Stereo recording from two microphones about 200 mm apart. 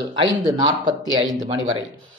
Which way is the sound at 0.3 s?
20° right (ahead or behind).